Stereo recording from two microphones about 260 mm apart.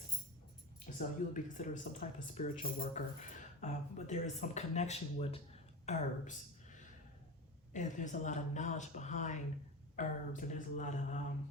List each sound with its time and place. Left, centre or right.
0.9 s speech: left
7.7 s speech: left